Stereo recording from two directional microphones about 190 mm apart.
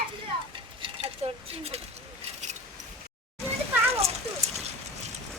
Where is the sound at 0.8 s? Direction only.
30° right (ahead or behind).